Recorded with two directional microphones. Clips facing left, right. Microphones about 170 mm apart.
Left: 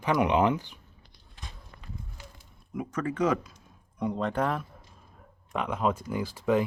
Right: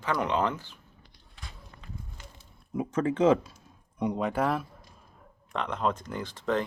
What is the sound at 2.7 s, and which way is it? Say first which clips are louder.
Speech: right 4 dB; 30° right (ahead or behind).